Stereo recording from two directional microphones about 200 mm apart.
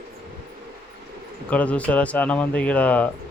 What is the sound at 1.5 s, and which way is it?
Speech, 5° left (ahead or behind).